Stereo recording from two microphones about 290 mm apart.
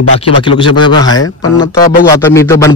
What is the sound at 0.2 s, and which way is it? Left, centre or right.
A man's voice, centre.